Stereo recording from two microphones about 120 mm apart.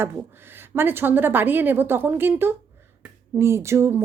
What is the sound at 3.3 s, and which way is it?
Speech, 20° right (ahead or behind).